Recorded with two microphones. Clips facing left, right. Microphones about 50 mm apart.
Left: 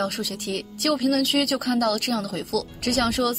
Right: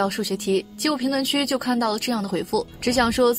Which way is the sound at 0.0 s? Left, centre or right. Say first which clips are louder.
Right 4 dB; right.